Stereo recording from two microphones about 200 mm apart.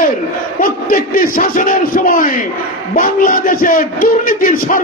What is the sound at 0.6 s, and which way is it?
A man's voice, 45° left (ahead or behind).